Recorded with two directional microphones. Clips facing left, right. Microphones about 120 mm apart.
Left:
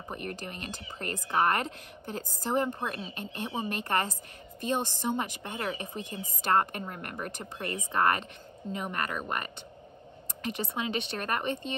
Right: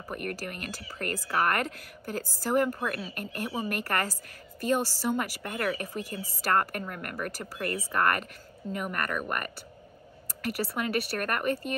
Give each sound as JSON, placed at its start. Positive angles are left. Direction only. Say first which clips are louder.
{"t": 0.4, "sound": "a woman's voice", "louder": "right 2 dB", "side_deg": 25}